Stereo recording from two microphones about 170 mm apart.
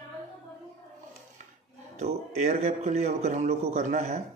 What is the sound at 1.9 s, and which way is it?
A man's voice, 40° right (ahead or behind).